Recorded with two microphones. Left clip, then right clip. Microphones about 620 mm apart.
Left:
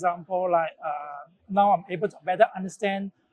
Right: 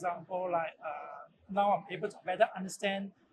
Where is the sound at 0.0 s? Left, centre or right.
Left.